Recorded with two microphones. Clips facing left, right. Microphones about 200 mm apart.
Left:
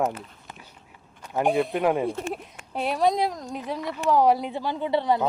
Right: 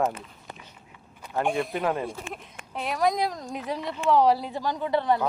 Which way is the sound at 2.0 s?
35° left (ahead or behind).